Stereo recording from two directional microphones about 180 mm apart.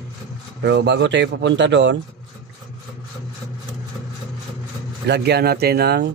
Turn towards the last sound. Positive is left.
turn(degrees=-65)  # may be behind; listen again after turning